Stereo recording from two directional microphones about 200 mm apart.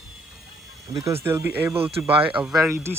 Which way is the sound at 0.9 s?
15° right (ahead or behind).